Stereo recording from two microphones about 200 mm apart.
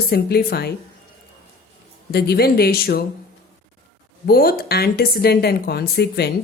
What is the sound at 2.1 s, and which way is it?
Speech, 50° left (ahead or behind).